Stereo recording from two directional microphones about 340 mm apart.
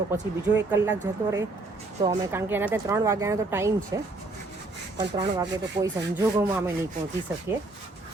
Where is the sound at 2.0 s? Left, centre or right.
Centre.